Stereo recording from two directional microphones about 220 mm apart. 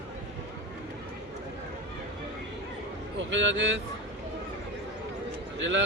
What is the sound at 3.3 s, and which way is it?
Speech, 55° right (ahead or behind).